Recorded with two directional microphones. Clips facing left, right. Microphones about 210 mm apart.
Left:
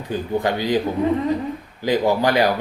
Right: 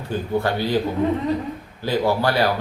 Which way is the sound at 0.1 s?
15° left (ahead or behind).